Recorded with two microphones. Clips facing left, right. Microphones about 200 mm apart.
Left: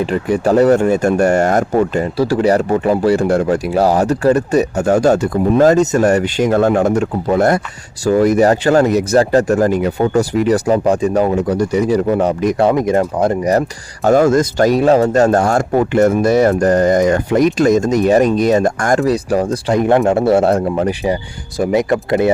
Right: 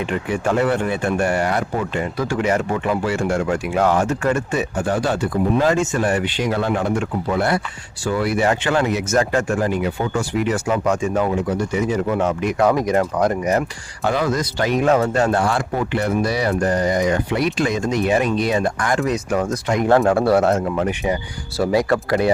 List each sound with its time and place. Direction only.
0.0 s speech: 35° left (ahead or behind)
12.6 s speech: 25° left (ahead or behind)
19.9 s speech: 20° left (ahead or behind)
21.6 s speech: 20° left (ahead or behind)